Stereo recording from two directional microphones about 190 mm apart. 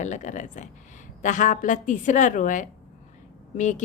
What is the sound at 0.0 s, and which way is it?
A woman's voice, 40° left (ahead or behind).